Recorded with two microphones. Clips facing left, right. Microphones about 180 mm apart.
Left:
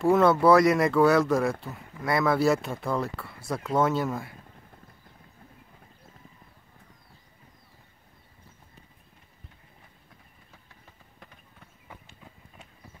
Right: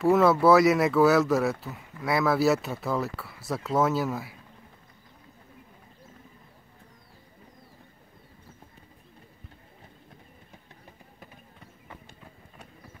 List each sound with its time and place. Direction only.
0.0 s speech: centre (ahead or behind)